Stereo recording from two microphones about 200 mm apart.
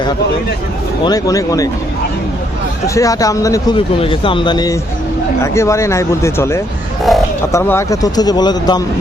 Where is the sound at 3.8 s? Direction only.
25° left (ahead or behind).